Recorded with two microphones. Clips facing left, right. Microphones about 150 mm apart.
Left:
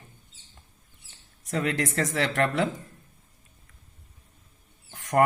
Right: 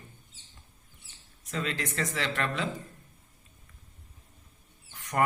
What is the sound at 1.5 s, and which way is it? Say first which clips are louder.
Speech: left 6 dB; 75° left (ahead or behind).